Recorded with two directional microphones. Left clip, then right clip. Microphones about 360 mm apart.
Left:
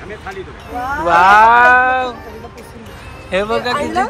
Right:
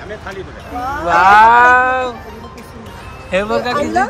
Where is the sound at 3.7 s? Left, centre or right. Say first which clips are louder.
Right 2 dB; left.